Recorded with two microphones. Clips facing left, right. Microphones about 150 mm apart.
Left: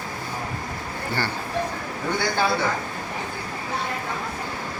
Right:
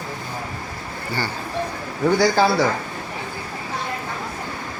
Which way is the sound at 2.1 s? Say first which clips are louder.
Right 6 dB; 80° right.